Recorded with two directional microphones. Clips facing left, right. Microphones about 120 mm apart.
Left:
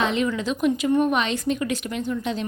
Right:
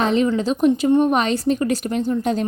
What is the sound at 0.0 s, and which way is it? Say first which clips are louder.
Speech: right 5 dB; 35° right (ahead or behind).